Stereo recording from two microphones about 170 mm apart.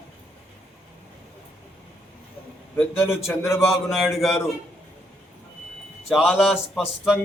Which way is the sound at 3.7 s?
Centre (ahead or behind).